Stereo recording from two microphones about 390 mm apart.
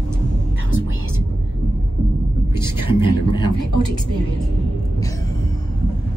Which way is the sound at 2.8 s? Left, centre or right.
Centre.